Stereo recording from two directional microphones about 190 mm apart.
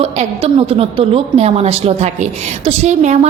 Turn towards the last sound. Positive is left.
turn(degrees=-35)  # may be behind; listen again after turning